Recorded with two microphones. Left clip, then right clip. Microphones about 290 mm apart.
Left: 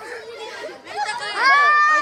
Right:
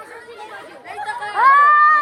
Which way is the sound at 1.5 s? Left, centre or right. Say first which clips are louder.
Right 3 dB; centre.